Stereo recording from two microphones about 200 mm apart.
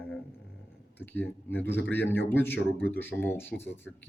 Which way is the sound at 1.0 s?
10° left (ahead or behind).